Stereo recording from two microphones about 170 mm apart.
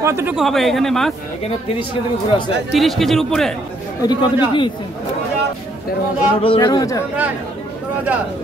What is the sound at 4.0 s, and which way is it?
Speech, 25° left (ahead or behind).